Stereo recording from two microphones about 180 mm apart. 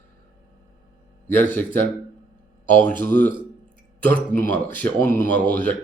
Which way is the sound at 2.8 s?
10° left (ahead or behind).